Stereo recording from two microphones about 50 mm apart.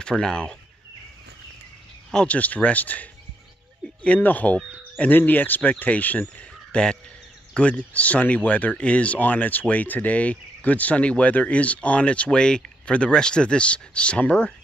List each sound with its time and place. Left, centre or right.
0.0 s speech: centre
2.2 s speech: left
6.7 s speech: centre
7.5 s speech: left